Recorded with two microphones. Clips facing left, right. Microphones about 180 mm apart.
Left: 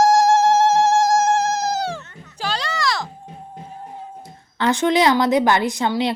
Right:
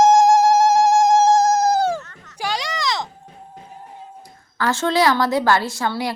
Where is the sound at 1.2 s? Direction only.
35° right (ahead or behind).